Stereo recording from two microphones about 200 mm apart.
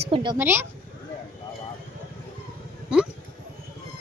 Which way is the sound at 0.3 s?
10° right (ahead or behind).